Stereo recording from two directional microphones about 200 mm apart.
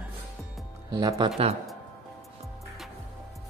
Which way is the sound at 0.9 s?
20° right (ahead or behind).